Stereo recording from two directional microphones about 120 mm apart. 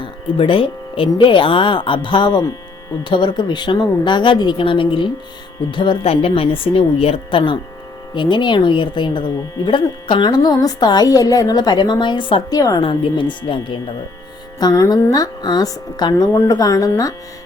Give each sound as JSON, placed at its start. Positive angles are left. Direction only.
{"t": 0.0, "sound": "a woman's voice", "side_deg": 45}
{"t": 14.6, "sound": "a woman's voice", "side_deg": 30}